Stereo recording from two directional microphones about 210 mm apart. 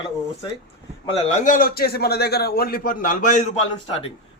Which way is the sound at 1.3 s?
35° left (ahead or behind).